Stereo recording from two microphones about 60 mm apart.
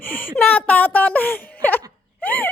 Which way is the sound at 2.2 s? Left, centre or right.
Left.